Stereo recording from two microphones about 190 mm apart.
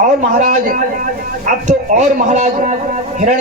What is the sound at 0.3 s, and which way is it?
A man's voice, 40° right (ahead or behind).